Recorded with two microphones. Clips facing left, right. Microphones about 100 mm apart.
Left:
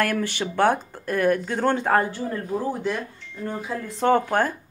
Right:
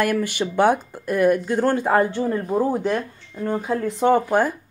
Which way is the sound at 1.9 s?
20° right (ahead or behind).